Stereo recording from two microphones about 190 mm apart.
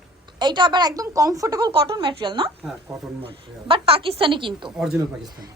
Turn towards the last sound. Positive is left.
turn(degrees=-5)  # may be behind; listen again after turning